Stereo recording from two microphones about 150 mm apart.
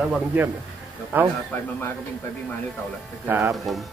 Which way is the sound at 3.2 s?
15° right (ahead or behind).